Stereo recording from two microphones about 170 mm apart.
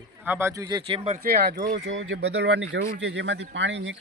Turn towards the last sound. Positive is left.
turn(degrees=-90)